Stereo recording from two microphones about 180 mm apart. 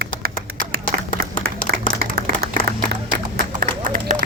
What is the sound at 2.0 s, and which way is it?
Clapping, 55° right (ahead or behind).